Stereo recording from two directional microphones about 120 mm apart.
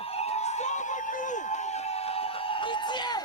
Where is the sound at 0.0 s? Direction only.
55° left (ahead or behind).